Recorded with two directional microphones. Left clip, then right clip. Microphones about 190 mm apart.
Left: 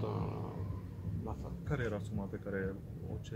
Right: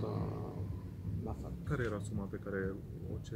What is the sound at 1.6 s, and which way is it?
Speech, 40° left (ahead or behind).